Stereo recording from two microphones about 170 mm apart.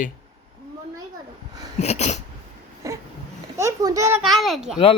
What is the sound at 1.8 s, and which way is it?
Speech, 40° left (ahead or behind).